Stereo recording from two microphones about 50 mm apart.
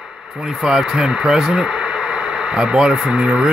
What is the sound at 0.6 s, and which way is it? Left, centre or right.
Speech, centre.